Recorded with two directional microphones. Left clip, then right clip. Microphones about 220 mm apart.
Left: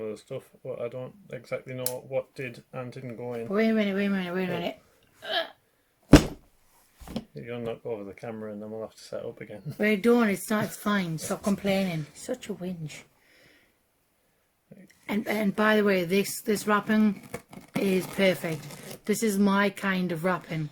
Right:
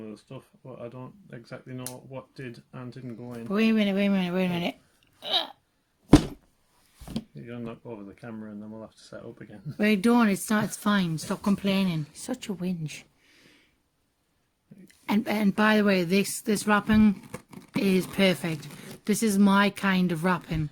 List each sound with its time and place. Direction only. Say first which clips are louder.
0.0 s speech: left 8 dB; 20° left (ahead or behind)
3.5 s speech: right 1 dB; 50° right (ahead or behind)
7.2 s speech: left 4 dB; 15° left (ahead or behind)
9.7 s speech: left 1 dB; 45° right (ahead or behind)
14.8 s speech: right 2 dB; 45° right (ahead or behind)
17.2 s a sound: left 2 dB; centre (ahead or behind)
17.7 s speech: right 1 dB; 35° right (ahead or behind)